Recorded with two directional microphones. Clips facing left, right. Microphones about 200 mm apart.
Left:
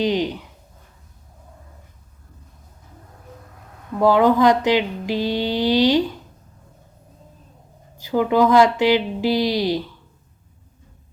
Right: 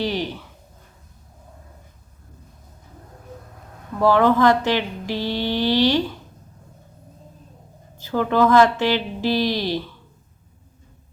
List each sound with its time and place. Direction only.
0.0 s speech: 20° left (ahead or behind)
3.9 s speech: 15° left (ahead or behind)
7.9 s speech: 15° left (ahead or behind)